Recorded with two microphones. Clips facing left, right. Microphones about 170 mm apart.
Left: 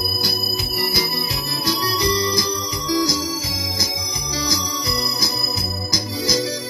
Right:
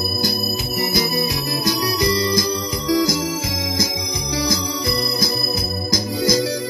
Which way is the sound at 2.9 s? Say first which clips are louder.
Right 2 dB; 55° right (ahead or behind).